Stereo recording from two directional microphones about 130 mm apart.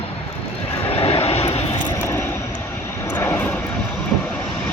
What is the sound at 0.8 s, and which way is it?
Vehicle, 50° left (ahead or behind).